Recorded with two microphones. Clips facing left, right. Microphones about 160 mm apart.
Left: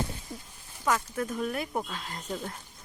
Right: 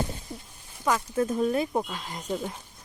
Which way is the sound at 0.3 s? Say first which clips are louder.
Right 2 dB; centre (ahead or behind).